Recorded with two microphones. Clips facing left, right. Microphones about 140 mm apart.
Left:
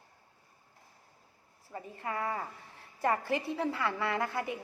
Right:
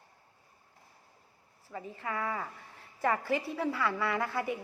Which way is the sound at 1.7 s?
25° left (ahead or behind).